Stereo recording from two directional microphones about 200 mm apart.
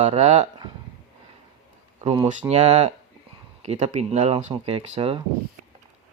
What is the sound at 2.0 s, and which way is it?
Speech, 35° right (ahead or behind).